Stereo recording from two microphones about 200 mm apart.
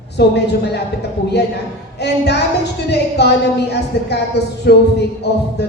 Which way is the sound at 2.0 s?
55° left (ahead or behind).